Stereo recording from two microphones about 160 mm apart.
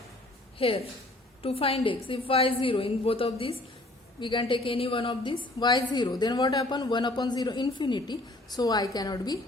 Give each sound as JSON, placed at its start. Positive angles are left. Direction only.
{"t": 0.6, "sound": "a woman's voice", "side_deg": 35}